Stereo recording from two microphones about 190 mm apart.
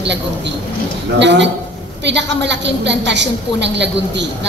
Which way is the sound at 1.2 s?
70° right (ahead or behind).